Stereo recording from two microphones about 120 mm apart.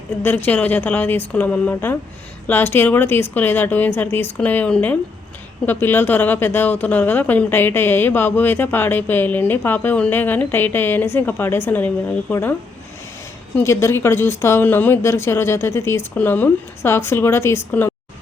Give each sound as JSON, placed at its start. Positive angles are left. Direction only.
{"t": 0.2, "sound": "speech", "side_deg": 15}
{"t": 13.6, "sound": "speech", "side_deg": 20}